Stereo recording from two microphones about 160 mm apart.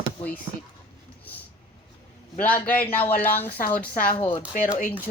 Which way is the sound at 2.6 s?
10° left (ahead or behind).